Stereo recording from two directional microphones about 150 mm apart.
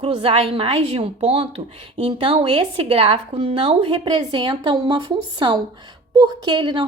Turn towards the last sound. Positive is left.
turn(degrees=-30)  # may be behind; listen again after turning